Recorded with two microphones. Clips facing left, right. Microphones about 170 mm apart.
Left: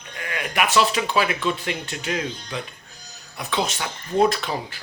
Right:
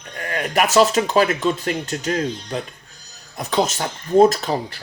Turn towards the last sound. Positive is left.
turn(degrees=-40)  # may be behind; listen again after turning